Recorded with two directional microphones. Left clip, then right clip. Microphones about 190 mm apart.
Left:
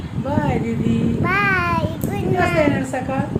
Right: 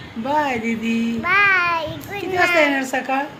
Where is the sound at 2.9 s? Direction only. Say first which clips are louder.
Right 2 dB; 45° right (ahead or behind).